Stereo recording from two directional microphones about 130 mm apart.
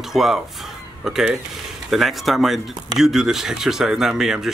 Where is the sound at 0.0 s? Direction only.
Centre (ahead or behind).